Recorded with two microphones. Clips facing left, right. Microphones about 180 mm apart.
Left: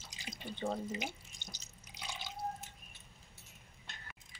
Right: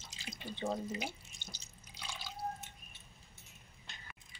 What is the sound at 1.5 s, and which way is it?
Drip, 15° left (ahead or behind).